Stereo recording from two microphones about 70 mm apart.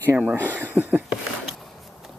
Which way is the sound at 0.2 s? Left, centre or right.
Right.